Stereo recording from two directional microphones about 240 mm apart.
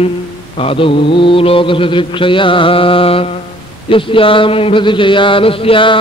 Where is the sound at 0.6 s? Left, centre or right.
Left.